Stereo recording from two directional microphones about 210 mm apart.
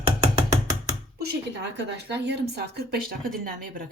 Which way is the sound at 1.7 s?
55° right (ahead or behind).